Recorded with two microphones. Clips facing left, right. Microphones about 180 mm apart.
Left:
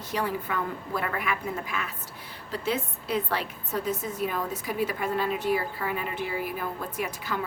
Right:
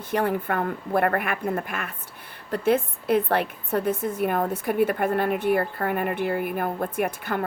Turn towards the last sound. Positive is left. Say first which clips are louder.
# right 6 dB
turn(degrees=-55)  # may be behind; listen again after turning